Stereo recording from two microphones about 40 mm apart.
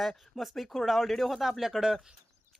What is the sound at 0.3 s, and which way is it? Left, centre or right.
Speech, centre.